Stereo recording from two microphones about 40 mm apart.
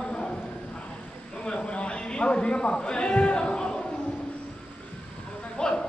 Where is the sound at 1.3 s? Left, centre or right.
Left.